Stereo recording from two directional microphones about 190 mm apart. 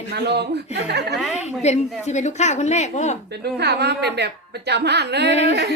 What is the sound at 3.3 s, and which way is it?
A woman's voice, 60° right (ahead or behind).